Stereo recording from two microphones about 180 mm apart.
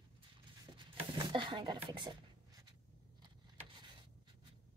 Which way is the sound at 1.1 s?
25° right (ahead or behind).